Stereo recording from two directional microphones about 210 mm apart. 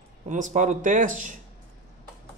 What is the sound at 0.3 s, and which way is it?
Speech, 35° right (ahead or behind).